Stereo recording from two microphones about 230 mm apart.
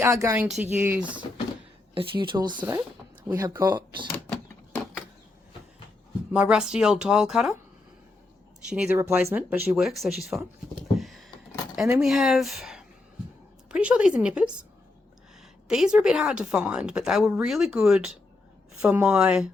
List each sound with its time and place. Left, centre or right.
0.0 s a woman's voice: centre
2.0 s speech: right
4.1 s a sound: centre
6.3 s a woman's voice: centre
8.7 s speech: centre
10.9 s a sound: centre
11.8 s a woman's voice: centre
15.7 s a woman's voice: centre